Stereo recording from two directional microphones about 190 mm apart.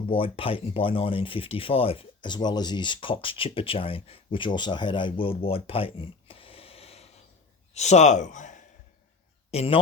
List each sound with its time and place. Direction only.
0.1 s speech: 30° left (ahead or behind)